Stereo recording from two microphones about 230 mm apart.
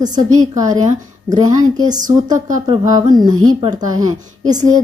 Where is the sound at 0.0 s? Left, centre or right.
Centre.